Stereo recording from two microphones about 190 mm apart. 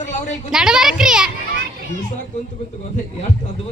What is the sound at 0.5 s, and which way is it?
Speech, 5° right (ahead or behind).